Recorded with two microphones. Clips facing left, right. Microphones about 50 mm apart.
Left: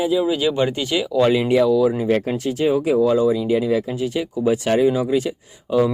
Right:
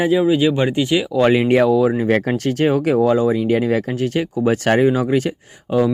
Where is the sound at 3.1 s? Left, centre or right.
Right.